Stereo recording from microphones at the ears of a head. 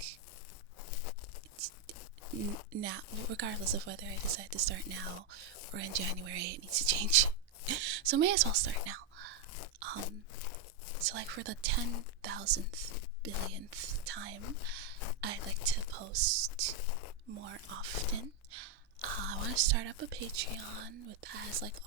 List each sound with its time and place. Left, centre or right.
2.7 s speech: right
9.8 s crunch: right
10.3 s a sound: left
11.0 s speech: right
16.7 s speech: left
17.2 s speech: right